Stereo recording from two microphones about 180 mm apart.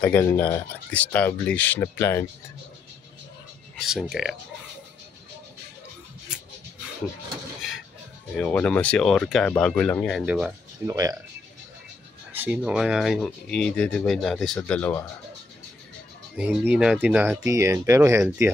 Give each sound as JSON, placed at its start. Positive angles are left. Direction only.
{"t": 0.0, "sound": "speech", "side_deg": 10}
{"t": 3.7, "sound": "speech", "side_deg": 0}
{"t": 8.4, "sound": "speech", "side_deg": 10}
{"t": 10.1, "sound": "speech", "side_deg": -5}
{"t": 10.9, "sound": "speech", "side_deg": -20}
{"t": 12.3, "sound": "speech", "side_deg": -10}
{"t": 16.3, "sound": "speech", "side_deg": -10}